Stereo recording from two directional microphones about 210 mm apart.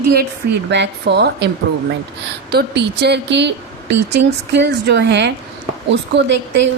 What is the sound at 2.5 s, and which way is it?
A woman's voice, 50° right (ahead or behind).